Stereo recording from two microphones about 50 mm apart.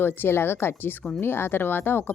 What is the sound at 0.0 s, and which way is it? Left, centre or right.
Speech, left.